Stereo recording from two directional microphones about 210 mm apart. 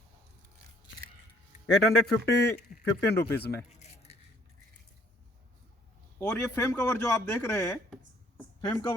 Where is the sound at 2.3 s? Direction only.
50° left (ahead or behind).